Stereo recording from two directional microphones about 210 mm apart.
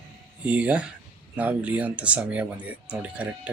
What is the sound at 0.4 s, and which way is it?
Speech, 5° right (ahead or behind).